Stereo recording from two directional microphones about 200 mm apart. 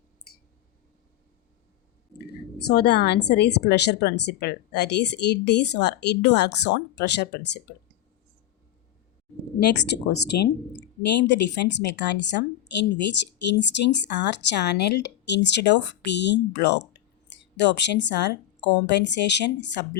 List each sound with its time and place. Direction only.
2.1 s speech: 55° left (ahead or behind)
9.6 s speech: 55° left (ahead or behind)